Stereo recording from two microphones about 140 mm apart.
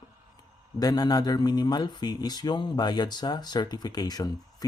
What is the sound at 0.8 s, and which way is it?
A man's voice, 30° left (ahead or behind).